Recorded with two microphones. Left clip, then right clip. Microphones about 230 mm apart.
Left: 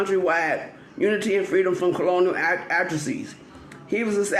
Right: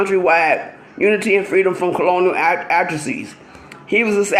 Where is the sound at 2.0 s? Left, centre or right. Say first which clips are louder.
Right 8 dB; right.